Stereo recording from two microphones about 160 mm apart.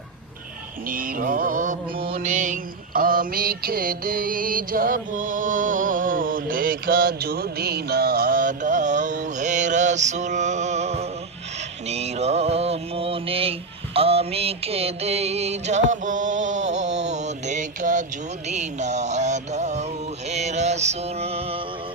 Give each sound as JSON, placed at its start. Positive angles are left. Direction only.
{"t": 0.9, "sound": "mantra", "side_deg": -60}
{"t": 11.9, "sound": "music", "side_deg": -40}